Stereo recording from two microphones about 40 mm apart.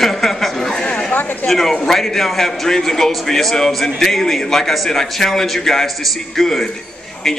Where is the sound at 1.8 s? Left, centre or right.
Centre.